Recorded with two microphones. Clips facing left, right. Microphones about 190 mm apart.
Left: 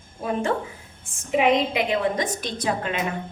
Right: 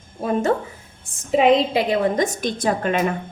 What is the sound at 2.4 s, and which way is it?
Speech, 50° right (ahead or behind).